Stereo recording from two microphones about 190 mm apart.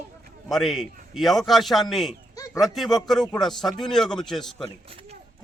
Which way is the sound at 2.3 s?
20° left (ahead or behind).